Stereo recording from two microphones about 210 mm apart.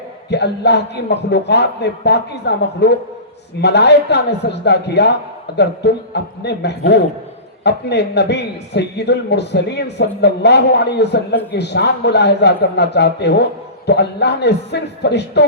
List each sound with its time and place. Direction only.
0.3 s a man's voice: 55° left (ahead or behind)